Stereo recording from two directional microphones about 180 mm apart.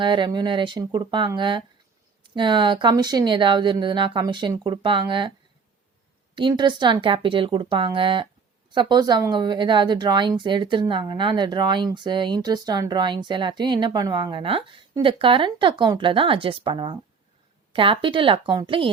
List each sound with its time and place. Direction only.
0.0 s speech: 25° right (ahead or behind)
6.3 s speech: 25° right (ahead or behind)